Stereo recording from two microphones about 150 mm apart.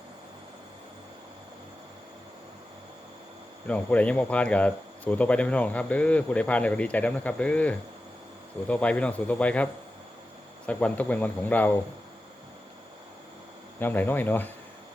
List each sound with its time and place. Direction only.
3.7 s speech: 10° left (ahead or behind)
10.7 s speech: 10° left (ahead or behind)
13.7 s speech: 10° left (ahead or behind)